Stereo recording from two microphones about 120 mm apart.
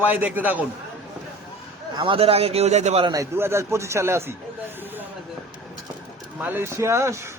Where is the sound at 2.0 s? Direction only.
50° right (ahead or behind); by 3.1 s 65° right (ahead or behind).